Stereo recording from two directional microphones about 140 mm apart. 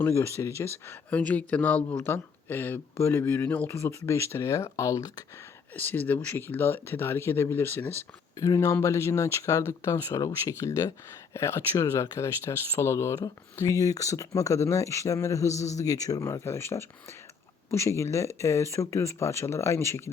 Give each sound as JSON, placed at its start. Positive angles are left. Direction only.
{"t": 0.0, "sound": "speech", "side_deg": 20}
{"t": 5.7, "sound": "speech", "side_deg": 15}